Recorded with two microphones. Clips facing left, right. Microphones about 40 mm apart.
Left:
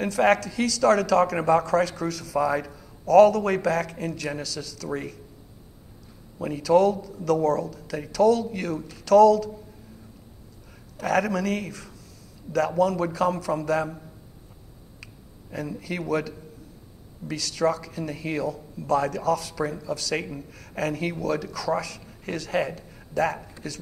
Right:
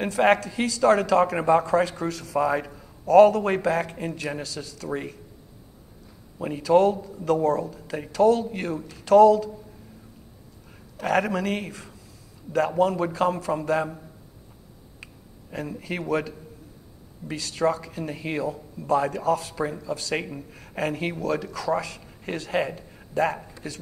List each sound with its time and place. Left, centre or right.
0.0 s a man's voice: right
6.4 s a man's voice: right
9.0 s a man's voice: right
11.1 s a man's voice: right
16.1 s a man's voice: right